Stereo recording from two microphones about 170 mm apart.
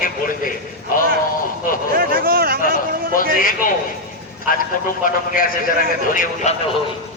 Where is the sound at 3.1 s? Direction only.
55° left (ahead or behind).